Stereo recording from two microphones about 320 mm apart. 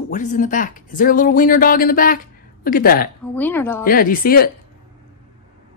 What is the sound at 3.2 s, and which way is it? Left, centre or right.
Speech, centre.